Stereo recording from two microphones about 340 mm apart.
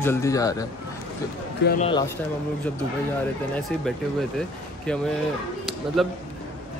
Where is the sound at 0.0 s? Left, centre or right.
Centre.